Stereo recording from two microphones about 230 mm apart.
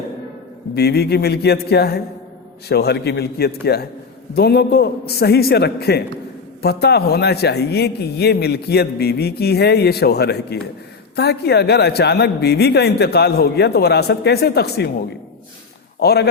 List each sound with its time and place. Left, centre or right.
0.8 s a man's voice: left
16.0 s a man's voice: left